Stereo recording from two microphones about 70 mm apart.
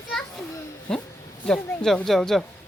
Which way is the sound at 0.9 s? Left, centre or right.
Centre.